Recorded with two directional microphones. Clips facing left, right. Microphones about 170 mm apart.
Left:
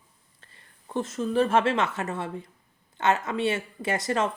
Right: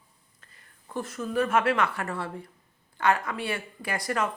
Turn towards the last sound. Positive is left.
turn(degrees=25)  # may be behind; listen again after turning